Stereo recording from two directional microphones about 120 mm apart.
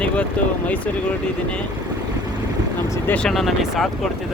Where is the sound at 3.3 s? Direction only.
Centre (ahead or behind).